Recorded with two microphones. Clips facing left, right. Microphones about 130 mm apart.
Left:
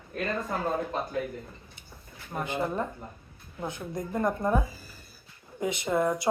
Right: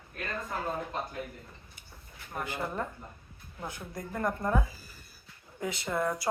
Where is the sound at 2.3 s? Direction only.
20° left (ahead or behind).